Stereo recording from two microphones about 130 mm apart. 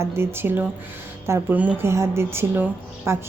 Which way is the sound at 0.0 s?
20° right (ahead or behind).